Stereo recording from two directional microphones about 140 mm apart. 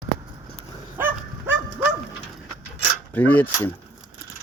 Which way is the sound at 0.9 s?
15° right (ahead or behind).